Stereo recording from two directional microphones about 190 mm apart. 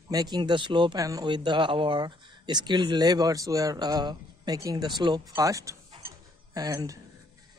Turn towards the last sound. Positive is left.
turn(degrees=-15)  # may be behind; listen again after turning